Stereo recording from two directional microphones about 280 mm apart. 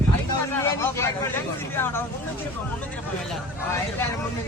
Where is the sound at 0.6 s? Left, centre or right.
Centre.